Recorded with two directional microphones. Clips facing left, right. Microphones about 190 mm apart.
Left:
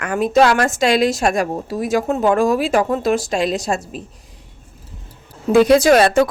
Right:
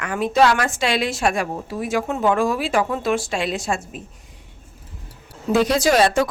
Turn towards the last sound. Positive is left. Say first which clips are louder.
# left 5 dB
turn(degrees=55)  # may be behind; listen again after turning